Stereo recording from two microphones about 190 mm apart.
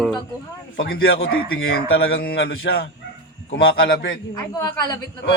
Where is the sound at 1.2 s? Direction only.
90° left.